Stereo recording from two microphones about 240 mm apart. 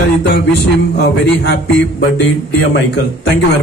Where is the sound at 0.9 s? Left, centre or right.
Left.